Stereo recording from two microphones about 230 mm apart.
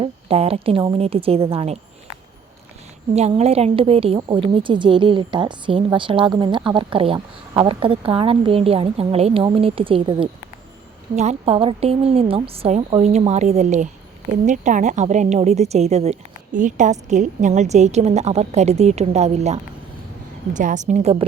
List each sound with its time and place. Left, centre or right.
0.0 s a woman's voice: right
3.2 s a woman's voice: right